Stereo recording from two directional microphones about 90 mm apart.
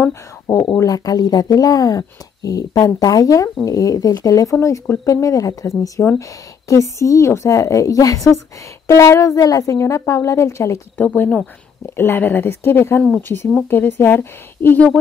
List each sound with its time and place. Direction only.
0.0 s speech: 30° left (ahead or behind)
0.7 s a woman's voice: 45° left (ahead or behind)
11.0 s speech: 20° left (ahead or behind)